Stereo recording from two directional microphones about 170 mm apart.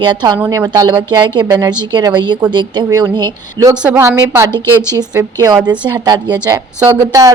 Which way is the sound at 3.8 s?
10° right (ahead or behind).